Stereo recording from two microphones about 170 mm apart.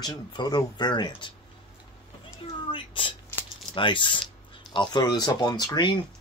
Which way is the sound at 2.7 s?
30° left (ahead or behind).